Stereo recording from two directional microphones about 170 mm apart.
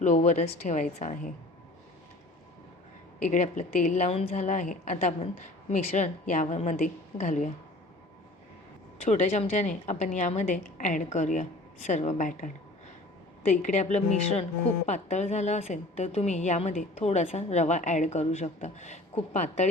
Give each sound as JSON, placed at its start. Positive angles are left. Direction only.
{"t": 0.0, "sound": "a woman's voice", "side_deg": 45}
{"t": 3.2, "sound": "a woman's voice", "side_deg": 45}
{"t": 9.0, "sound": "a woman's voice", "side_deg": 40}